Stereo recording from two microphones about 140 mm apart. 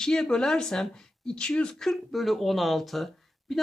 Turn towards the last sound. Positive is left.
turn(degrees=0)  # may be behind; listen again after turning